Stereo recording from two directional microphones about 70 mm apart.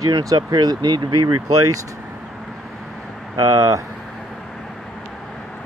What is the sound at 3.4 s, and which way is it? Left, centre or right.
Speech, right.